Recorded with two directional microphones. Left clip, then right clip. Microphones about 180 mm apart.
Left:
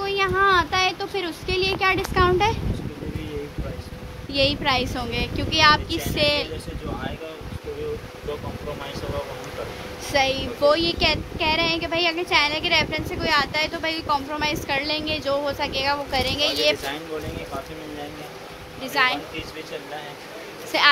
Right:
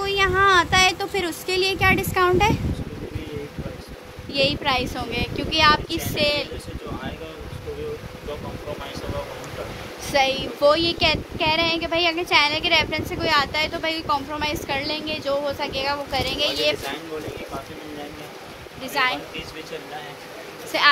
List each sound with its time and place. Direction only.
0.0 s a sound: 10° right (ahead or behind)
4.3 s speech: centre (ahead or behind)
10.1 s speech: 5° right (ahead or behind)
19.0 s a woman's voice: 10° left (ahead or behind)
20.7 s a woman's voice: 5° left (ahead or behind)